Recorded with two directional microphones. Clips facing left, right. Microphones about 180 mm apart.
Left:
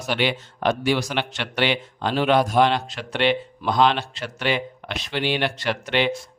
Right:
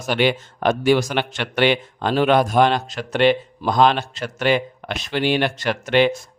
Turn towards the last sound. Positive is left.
turn(degrees=-45)  # may be behind; listen again after turning